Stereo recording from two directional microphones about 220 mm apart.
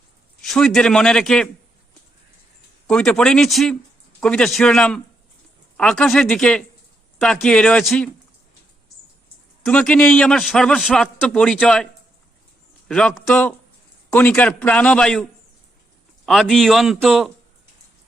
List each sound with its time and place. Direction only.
0.4 s a man's voice: centre (ahead or behind)
2.8 s a man's voice: 5° left (ahead or behind)
9.6 s a man's voice: 5° left (ahead or behind)
12.9 s a man's voice: 5° left (ahead or behind)
16.2 s a man's voice: centre (ahead or behind)